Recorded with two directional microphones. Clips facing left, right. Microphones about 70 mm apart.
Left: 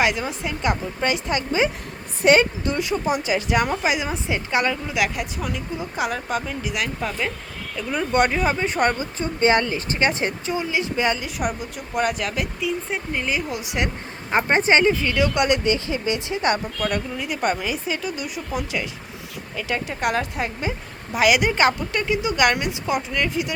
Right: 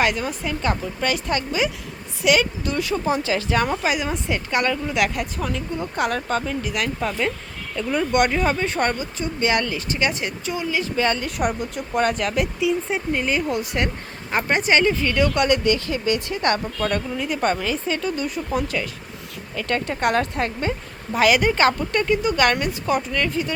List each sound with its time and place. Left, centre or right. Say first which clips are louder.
0.0 s a woman's voice: even; centre
9.1 s a woman's voice: left 3 dB; left; by 13.7 s centre
13.7 s speech: right 1 dB; centre
16.8 s a woman's voice: right 2 dB; centre